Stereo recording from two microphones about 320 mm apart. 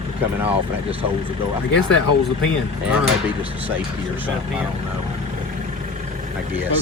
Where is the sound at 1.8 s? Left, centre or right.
Left.